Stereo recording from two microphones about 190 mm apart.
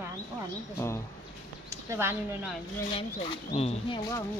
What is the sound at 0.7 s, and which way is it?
Speech, 15° left (ahead or behind).